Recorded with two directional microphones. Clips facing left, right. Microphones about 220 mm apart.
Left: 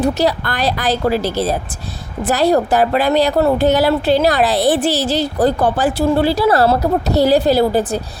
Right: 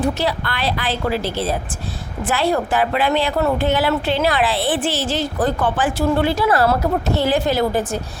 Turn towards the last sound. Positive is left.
turn(degrees=35)  # may be behind; listen again after turning